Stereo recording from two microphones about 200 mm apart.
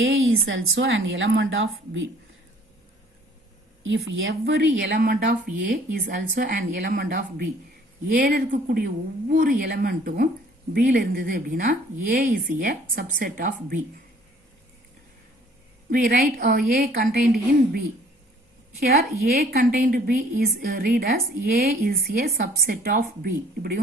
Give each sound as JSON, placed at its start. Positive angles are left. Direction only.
{"t": 0.1, "sound": "a sound", "side_deg": -85}
{"t": 0.7, "sound": "speech", "side_deg": -65}
{"t": 3.8, "sound": "speech", "side_deg": -65}
{"t": 15.9, "sound": "speech", "side_deg": -50}
{"t": 18.8, "sound": "speech", "side_deg": -50}